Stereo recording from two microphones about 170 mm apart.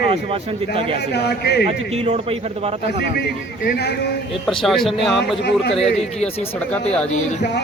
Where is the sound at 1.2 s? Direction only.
70° left (ahead or behind).